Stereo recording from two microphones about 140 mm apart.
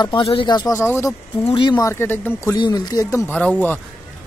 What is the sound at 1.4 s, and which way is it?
Speech, 35° left (ahead or behind).